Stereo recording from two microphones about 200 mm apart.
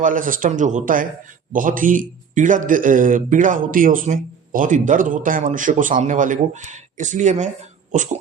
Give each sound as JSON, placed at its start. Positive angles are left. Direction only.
{"t": 0.0, "sound": "a man's voice", "side_deg": -45}